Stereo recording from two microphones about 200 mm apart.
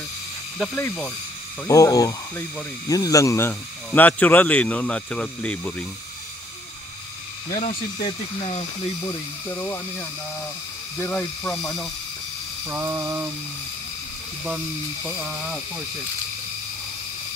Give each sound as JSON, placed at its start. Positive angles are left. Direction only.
{"t": 0.6, "sound": "speech", "side_deg": 5}
{"t": 7.5, "sound": "speech", "side_deg": 30}
{"t": 9.0, "sound": "speech", "side_deg": 15}
{"t": 12.6, "sound": "a sound", "side_deg": -15}
{"t": 15.0, "sound": "speech", "side_deg": -5}